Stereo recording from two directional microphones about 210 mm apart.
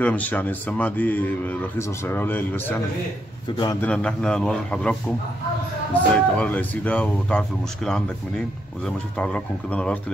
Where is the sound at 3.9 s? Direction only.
5° left (ahead or behind).